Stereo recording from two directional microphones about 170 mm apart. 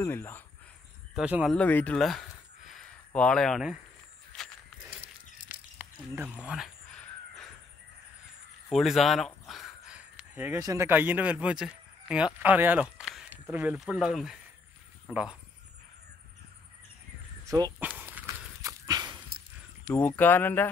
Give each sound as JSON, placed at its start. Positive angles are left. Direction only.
{"t": 0.0, "sound": "speech", "side_deg": 15}
{"t": 1.1, "sound": "speech", "side_deg": -5}
{"t": 1.5, "sound": "speech", "side_deg": 10}
{"t": 4.3, "sound": "a sound", "side_deg": 5}
{"t": 5.5, "sound": "a sound", "side_deg": -10}
{"t": 8.6, "sound": "speech", "side_deg": 0}
{"t": 17.5, "sound": "speech", "side_deg": -25}
{"t": 17.7, "sound": "horse", "side_deg": -10}
{"t": 19.9, "sound": "speech", "side_deg": 10}